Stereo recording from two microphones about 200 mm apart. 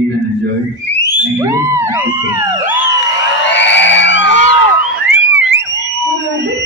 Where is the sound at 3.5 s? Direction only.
65° left (ahead or behind).